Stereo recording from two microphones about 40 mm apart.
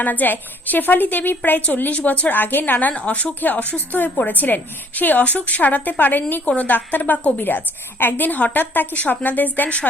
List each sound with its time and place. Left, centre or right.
0.0 s a woman's voice: left
9.6 s a woman's voice: left